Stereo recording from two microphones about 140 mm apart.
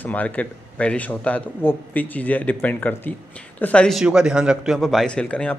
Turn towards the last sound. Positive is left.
turn(degrees=10)  # may be behind; listen again after turning